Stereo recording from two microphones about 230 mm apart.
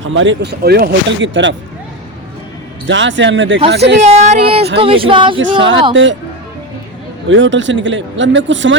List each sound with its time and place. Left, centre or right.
0.0 s speech: right
2.8 s speech: right
4.0 s speech: right
5.9 s speech: right
7.3 s speech: right